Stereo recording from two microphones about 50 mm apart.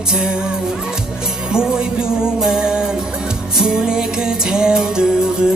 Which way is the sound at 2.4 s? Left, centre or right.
Centre.